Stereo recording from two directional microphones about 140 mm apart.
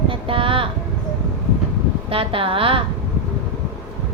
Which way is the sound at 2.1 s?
40° right (ahead or behind).